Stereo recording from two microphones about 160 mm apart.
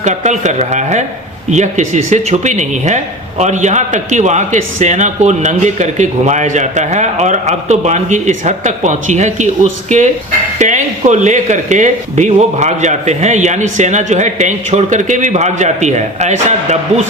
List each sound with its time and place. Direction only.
0.0 s speech: 50° right (ahead or behind)
10.6 s speech: 50° right (ahead or behind)